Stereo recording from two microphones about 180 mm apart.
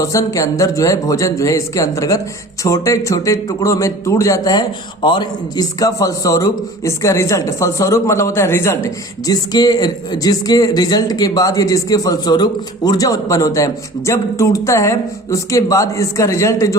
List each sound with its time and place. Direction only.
0.0 s a man's voice: 15° left (ahead or behind)